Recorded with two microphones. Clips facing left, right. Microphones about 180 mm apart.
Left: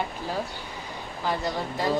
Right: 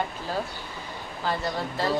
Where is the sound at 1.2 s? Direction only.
15° left (ahead or behind).